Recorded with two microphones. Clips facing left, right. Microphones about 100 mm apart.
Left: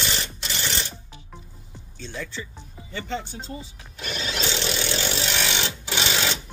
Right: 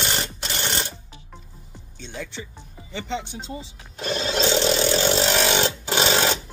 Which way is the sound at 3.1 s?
20° right (ahead or behind).